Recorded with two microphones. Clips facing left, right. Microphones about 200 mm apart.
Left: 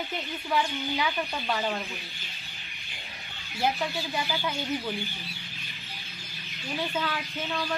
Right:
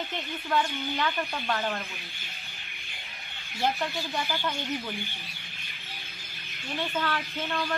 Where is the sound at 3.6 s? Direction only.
10° left (ahead or behind).